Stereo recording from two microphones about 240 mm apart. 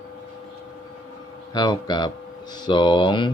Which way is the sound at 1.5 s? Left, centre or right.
Centre.